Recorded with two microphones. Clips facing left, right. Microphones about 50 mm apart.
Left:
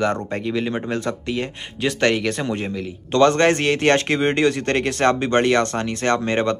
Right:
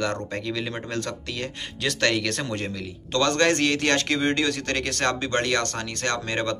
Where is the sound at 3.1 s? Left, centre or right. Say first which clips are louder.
Left 6 dB; left.